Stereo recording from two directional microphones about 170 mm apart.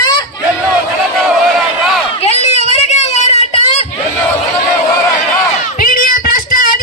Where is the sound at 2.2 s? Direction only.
40° left (ahead or behind).